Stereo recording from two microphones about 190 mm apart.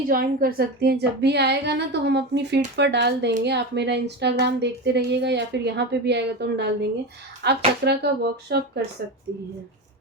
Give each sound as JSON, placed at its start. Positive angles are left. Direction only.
{"t": 0.1, "sound": "speech", "side_deg": -50}